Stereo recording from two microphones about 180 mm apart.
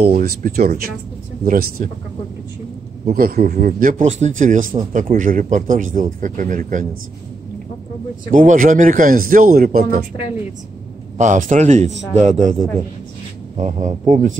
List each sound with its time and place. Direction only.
0.0 s a man's voice: 60° right (ahead or behind)
3.1 s speech: 55° right (ahead or behind)
3.5 s a man's voice: 45° right (ahead or behind)
8.3 s a man's voice: 45° right (ahead or behind)
11.1 s a man's voice: 45° right (ahead or behind)